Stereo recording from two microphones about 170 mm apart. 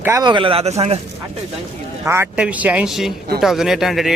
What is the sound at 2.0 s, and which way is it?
A man's voice, 15° right (ahead or behind).